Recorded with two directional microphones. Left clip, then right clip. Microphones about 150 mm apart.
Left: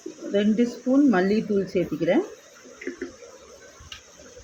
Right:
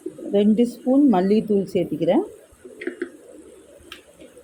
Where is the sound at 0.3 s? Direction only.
25° right (ahead or behind).